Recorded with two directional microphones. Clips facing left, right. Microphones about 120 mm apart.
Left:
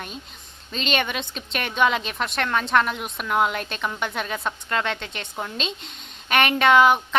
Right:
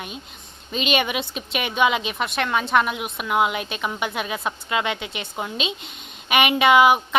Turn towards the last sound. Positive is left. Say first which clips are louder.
# right 1 dB
turn(degrees=-10)  # may be behind; listen again after turning